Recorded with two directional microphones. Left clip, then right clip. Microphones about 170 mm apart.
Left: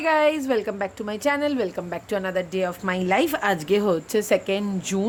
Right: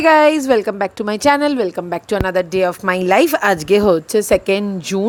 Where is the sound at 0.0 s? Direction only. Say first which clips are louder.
Right 9 dB; 45° right (ahead or behind).